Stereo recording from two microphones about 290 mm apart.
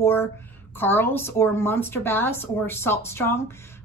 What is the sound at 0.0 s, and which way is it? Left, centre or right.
A woman's voice, centre.